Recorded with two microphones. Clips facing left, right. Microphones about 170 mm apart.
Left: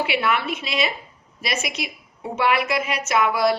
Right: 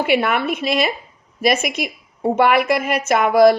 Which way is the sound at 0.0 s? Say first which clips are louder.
Right 5 dB; 50° right (ahead or behind).